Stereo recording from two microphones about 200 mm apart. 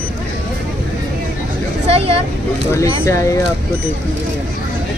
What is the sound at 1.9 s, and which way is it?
Vehicle, 30° right (ahead or behind).